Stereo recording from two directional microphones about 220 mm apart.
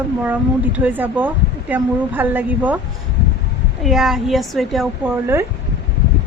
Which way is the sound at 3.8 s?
Centre (ahead or behind).